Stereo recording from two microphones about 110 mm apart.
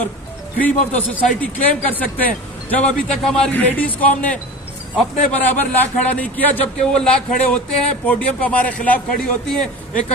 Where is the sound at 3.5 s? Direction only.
15° left (ahead or behind).